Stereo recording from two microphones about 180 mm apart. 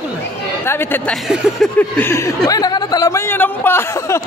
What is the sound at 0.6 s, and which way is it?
Speech, 15° left (ahead or behind).